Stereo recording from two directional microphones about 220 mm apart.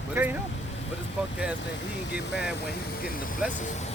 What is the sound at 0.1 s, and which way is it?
Speech, 10° right (ahead or behind).